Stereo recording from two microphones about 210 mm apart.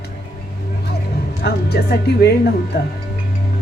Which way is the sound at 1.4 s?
50° left (ahead or behind).